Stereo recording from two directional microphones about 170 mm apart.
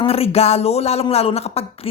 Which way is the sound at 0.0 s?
35° left (ahead or behind).